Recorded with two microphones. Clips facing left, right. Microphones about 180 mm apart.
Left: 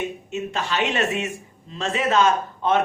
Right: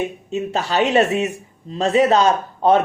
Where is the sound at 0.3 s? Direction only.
35° right (ahead or behind).